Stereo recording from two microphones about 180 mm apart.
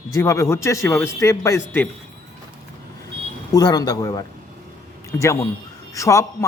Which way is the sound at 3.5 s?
20° left (ahead or behind).